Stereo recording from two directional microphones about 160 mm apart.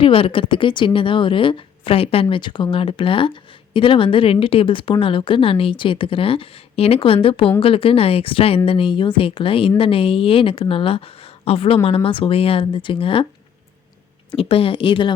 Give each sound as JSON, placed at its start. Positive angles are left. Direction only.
{"t": 0.0, "sound": "a woman's voice", "side_deg": 35}
{"t": 14.3, "sound": "a woman's voice", "side_deg": 35}